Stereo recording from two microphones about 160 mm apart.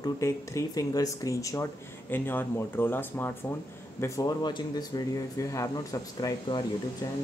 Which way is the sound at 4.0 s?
25° left (ahead or behind).